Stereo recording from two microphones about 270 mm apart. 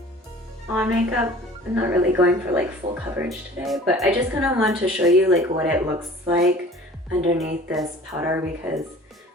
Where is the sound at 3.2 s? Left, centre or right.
Centre.